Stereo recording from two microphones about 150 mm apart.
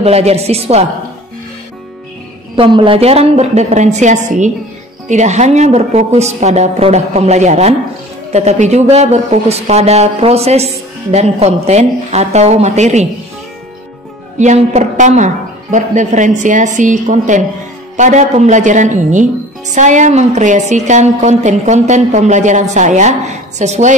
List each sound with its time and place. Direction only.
0.0 s speech: 45° right (ahead or behind)
2.5 s speech: 35° right (ahead or behind)
14.4 s a woman's voice: 50° right (ahead or behind)